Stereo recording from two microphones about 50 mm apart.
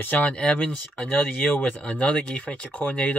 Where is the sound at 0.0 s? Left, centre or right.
Left.